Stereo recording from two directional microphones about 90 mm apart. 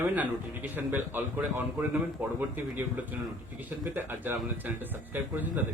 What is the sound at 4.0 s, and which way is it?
Speech, 20° right (ahead or behind).